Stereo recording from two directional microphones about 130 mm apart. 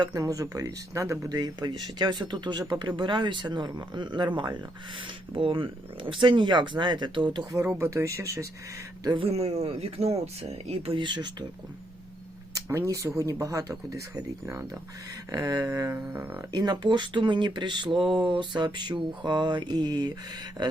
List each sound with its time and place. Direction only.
0.0 s speech: 25° right (ahead or behind)
7.6 s speech: 20° right (ahead or behind)
9.0 s speech: 45° right (ahead or behind)
12.5 s speech: 20° right (ahead or behind)
16.0 s speech: 10° right (ahead or behind)
16.5 s speech: 30° right (ahead or behind)